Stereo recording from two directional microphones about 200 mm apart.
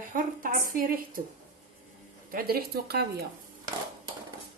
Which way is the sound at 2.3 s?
50° right (ahead or behind).